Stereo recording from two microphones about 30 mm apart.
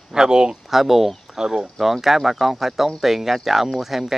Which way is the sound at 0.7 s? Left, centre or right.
Centre.